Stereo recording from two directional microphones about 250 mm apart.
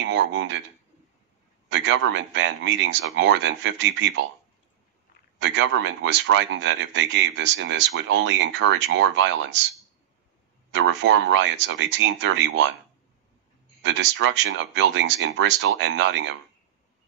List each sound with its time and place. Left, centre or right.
0.0 s a man's voice: right
1.7 s a man's voice: right
5.4 s a man's voice: right
10.7 s a man's voice: right
13.8 s a man's voice: right